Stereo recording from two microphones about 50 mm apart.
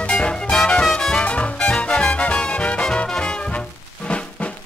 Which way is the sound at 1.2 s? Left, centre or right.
Left.